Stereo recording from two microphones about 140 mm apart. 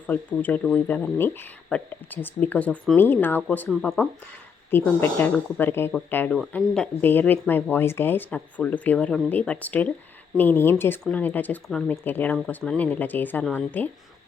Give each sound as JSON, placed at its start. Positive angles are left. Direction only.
{"t": 0.1, "sound": "speech", "side_deg": 10}
{"t": 4.7, "sound": "speech", "side_deg": 15}